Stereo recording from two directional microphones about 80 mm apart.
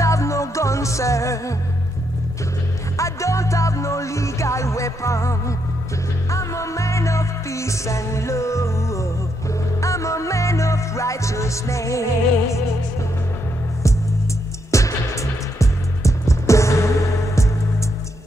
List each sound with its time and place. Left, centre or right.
0.0 s music: left
3.0 s music: left
14.7 s music: left